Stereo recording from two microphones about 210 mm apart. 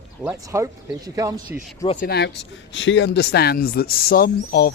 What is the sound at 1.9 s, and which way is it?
Speech, 40° left (ahead or behind).